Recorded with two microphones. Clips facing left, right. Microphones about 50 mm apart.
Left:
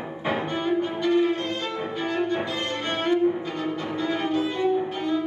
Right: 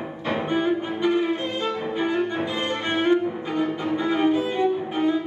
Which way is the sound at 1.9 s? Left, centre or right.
Centre.